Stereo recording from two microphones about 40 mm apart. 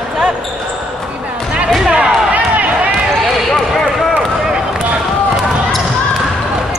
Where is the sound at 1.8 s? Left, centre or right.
Centre.